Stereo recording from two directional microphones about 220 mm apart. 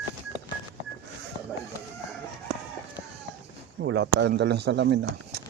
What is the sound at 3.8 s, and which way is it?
Speech, 55° right (ahead or behind).